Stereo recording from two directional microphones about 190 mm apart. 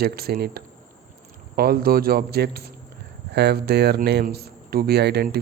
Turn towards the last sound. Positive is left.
turn(degrees=-60)  # may be behind; listen again after turning